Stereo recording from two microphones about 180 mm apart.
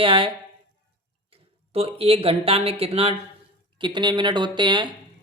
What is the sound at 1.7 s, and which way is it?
Speech, 35° right (ahead or behind).